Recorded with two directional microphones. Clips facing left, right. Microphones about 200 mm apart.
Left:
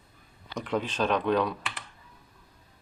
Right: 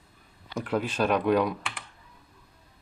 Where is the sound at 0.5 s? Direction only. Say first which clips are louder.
Right 2 dB; 5° right (ahead or behind).